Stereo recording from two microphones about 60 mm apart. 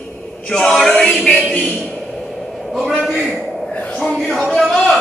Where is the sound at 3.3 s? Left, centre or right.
Left.